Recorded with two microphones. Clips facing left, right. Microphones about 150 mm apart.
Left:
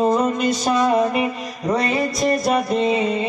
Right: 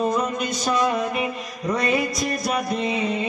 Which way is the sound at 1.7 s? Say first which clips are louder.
Left 2 dB; 30° left (ahead or behind).